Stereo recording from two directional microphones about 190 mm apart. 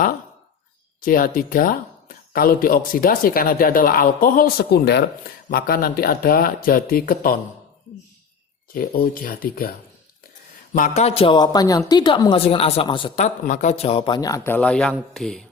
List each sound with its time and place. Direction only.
1.0 s speech: 45° left (ahead or behind)
8.7 s speech: 50° left (ahead or behind)
10.8 s speech: 40° left (ahead or behind); by 15.4 s centre (ahead or behind)